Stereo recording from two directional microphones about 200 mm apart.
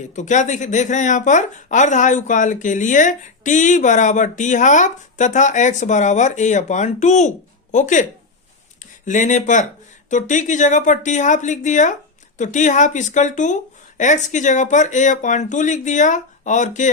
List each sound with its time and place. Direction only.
0.2 s speech: 35° left (ahead or behind)
9.0 s speech: 40° left (ahead or behind)